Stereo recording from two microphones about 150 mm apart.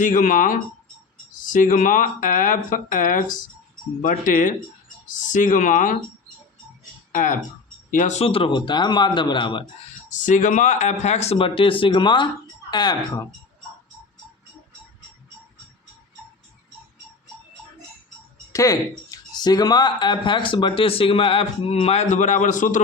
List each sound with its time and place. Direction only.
0.0 s speech: 65° left (ahead or behind)
7.1 s speech: 60° left (ahead or behind); by 9.6 s 35° left (ahead or behind)
10.1 s speech: 55° left (ahead or behind); by 13.2 s 30° left (ahead or behind)
18.5 s speech: 20° left (ahead or behind); by 22.8 s 55° left (ahead or behind)